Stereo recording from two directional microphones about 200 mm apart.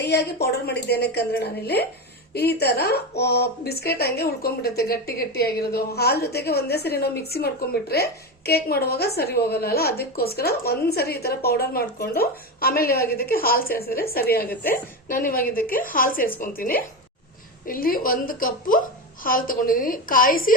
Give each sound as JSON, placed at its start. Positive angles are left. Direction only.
{"t": 0.0, "sound": "a woman's voice", "side_deg": 55}
{"t": 14.5, "sound": "a woman's voice", "side_deg": 10}
{"t": 15.1, "sound": "a woman's voice", "side_deg": 45}